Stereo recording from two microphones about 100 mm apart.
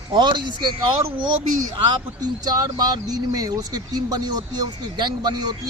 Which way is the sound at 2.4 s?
40° right (ahead or behind).